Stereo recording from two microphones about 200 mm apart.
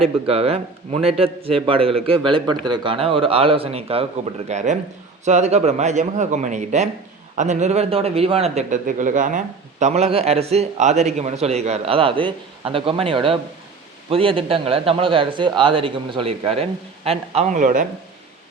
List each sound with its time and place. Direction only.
0.0 s a man's voice: 30° right (ahead or behind)